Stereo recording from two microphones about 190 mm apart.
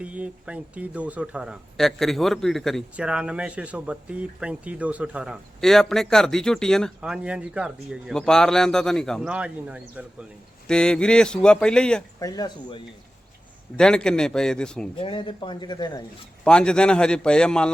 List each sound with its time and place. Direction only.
0.0 s speech: 5° right (ahead or behind)
12.2 s speech: 20° left (ahead or behind)
13.7 s speech: 5° left (ahead or behind)
14.9 s speech: 25° left (ahead or behind)
16.4 s speech: 5° left (ahead or behind)